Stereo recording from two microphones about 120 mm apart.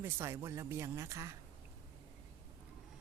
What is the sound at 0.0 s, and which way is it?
Speech, 20° right (ahead or behind).